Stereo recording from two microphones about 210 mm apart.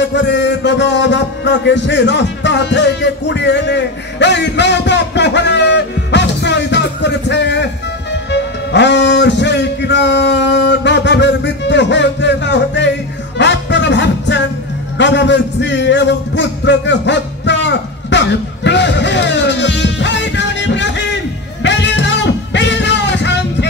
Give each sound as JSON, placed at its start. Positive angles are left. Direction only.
{"t": 0.0, "sound": "music", "side_deg": 55}
{"t": 15.0, "sound": "a sound", "side_deg": 60}
{"t": 21.6, "sound": "music", "side_deg": 60}